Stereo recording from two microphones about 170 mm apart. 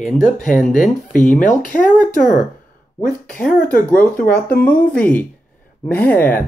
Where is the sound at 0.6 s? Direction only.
50° left (ahead or behind).